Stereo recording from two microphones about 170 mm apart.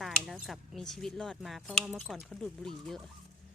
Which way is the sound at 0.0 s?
Centre (ahead or behind).